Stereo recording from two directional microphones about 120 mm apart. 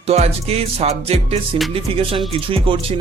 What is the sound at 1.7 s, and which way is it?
Speech, 50° right (ahead or behind).